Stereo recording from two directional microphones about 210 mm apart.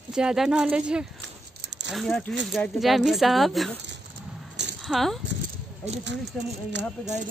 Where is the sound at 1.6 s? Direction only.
55° right (ahead or behind).